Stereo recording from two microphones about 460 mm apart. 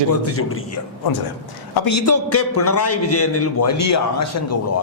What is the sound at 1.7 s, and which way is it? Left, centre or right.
A man's voice, left.